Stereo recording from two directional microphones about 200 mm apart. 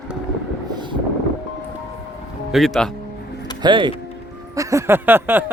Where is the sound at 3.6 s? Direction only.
25° right (ahead or behind).